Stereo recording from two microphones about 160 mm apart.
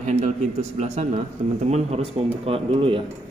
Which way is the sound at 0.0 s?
45° right (ahead or behind).